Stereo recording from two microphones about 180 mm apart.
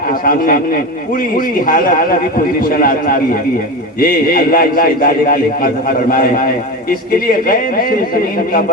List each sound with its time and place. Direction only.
1.6 s a man's voice: 55° left (ahead or behind)
7.4 s a man's voice: 55° left (ahead or behind)